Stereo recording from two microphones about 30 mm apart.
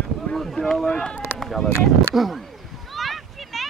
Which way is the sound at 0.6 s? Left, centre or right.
Centre.